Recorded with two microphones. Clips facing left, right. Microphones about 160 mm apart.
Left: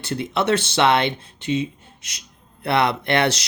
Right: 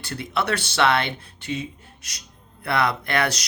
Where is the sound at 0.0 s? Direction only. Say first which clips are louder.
Left 4 dB; 20° left (ahead or behind).